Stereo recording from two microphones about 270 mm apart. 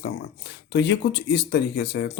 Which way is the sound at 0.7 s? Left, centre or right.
Left.